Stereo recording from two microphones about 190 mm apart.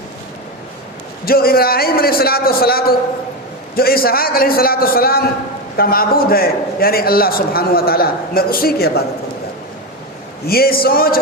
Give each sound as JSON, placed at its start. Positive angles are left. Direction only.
{"t": 1.2, "sound": "a man's voice", "side_deg": 50}
{"t": 10.4, "sound": "a man's voice", "side_deg": 55}